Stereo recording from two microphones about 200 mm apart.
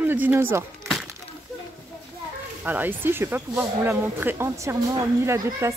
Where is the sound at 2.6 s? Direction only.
10° right (ahead or behind).